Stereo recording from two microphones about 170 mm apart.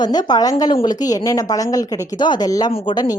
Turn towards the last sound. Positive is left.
turn(degrees=25)  # may be behind; listen again after turning